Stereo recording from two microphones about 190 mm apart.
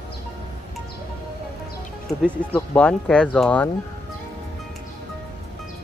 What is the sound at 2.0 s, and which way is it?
Speech, 5° left (ahead or behind).